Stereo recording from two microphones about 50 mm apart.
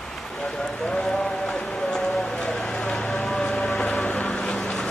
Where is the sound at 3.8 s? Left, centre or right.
Left.